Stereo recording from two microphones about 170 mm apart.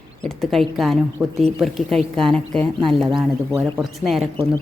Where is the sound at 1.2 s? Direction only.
15° right (ahead or behind).